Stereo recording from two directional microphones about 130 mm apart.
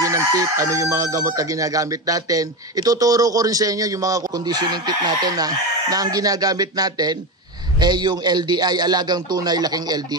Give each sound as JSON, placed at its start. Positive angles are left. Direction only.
{"t": 0.0, "sound": "crowing", "side_deg": -25}
{"t": 7.8, "sound": "a man's voice", "side_deg": -35}